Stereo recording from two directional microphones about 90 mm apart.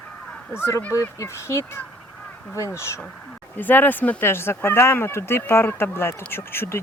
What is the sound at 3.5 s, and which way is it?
Speech, 20° left (ahead or behind).